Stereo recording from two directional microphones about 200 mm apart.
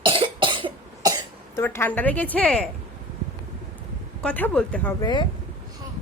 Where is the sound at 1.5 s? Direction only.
10° left (ahead or behind).